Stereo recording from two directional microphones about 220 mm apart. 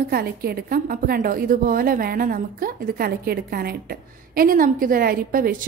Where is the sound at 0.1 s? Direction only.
45° right (ahead or behind).